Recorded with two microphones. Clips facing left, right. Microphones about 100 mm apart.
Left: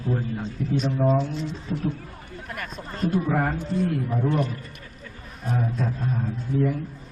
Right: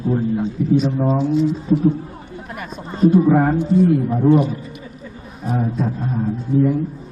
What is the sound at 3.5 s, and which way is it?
A man's voice, centre (ahead or behind).